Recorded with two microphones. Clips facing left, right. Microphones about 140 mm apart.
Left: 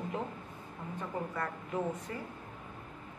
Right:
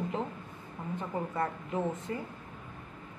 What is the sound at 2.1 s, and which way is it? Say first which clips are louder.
Speech: right 5 dB; 25° right (ahead or behind).